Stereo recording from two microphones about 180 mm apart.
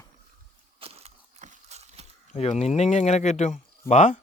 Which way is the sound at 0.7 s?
35° right (ahead or behind).